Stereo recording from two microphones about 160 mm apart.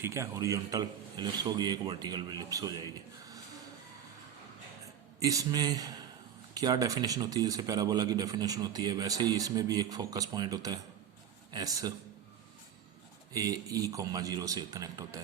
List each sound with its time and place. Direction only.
0.0 s speech: 20° right (ahead or behind)
5.2 s speech: 20° right (ahead or behind)
13.3 s speech: 20° right (ahead or behind)